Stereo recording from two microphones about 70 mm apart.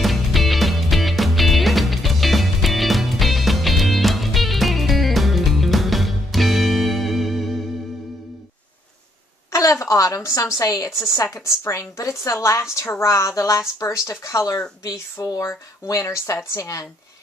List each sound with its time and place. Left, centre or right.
0.0 s music: centre
9.5 s a sound: left
10.6 s a woman's voice: left